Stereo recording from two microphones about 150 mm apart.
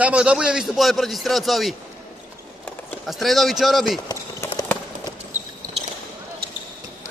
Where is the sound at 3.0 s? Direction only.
Centre (ahead or behind).